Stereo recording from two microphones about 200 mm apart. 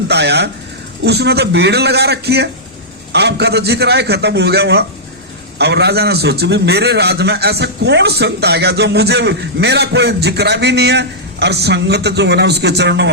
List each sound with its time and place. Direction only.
0.1 s a man's voice: 60° right (ahead or behind)